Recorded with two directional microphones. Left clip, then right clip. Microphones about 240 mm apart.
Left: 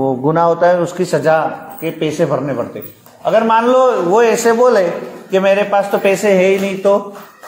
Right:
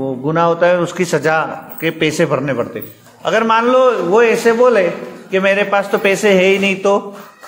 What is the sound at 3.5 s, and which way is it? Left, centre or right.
A man's voice, centre.